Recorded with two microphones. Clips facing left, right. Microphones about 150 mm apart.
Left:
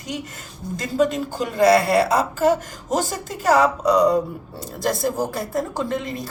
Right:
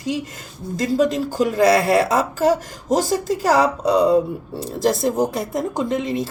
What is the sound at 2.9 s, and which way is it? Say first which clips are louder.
A woman's voice: right 5 dB; 35° right (ahead or behind).